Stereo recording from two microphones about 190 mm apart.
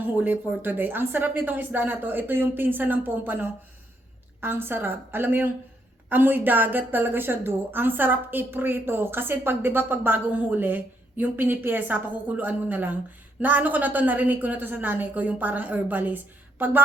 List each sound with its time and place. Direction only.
0.0 s a woman's voice: 10° right (ahead or behind)